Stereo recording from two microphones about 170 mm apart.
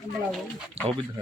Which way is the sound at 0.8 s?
35° right (ahead or behind).